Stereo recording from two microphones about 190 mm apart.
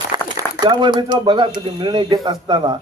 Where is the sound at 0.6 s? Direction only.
25° right (ahead or behind).